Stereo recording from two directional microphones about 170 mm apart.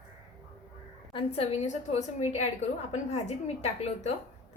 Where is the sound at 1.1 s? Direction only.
35° left (ahead or behind).